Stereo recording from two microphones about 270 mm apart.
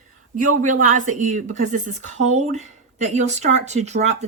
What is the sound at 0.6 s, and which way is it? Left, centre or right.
A woman's voice, right.